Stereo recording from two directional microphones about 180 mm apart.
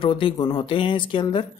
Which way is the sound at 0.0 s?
30° left (ahead or behind).